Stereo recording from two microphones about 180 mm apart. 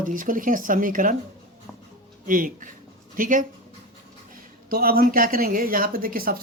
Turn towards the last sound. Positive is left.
turn(degrees=-55)  # may be behind; listen again after turning